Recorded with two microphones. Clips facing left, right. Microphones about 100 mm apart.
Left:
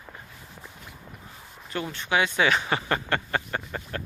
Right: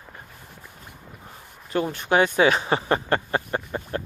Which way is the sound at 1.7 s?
45° right (ahead or behind).